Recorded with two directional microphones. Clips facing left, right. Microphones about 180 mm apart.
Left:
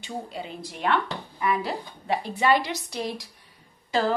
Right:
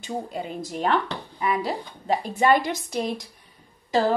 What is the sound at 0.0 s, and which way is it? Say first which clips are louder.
Speech: right 4 dB; 50° right (ahead or behind).